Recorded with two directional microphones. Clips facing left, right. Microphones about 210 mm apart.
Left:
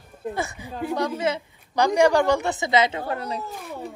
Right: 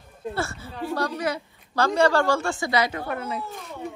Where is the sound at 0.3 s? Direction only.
15° left (ahead or behind).